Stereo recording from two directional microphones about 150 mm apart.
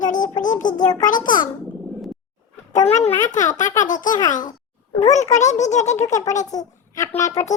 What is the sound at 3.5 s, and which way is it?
Speech, 55° left (ahead or behind).